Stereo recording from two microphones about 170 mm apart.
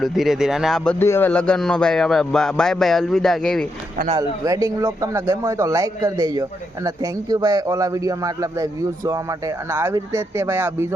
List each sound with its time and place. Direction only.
0.0 s speech: centre (ahead or behind)
0.9 s speech: 15° left (ahead or behind)
4.2 s a man's voice: 20° right (ahead or behind)